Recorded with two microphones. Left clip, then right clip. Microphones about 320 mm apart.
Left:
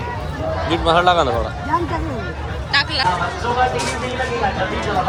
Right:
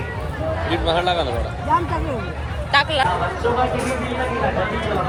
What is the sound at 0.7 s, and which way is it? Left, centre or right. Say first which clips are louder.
Speech: left 6 dB; left.